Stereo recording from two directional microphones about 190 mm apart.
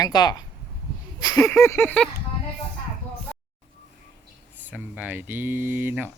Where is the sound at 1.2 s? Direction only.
15° left (ahead or behind).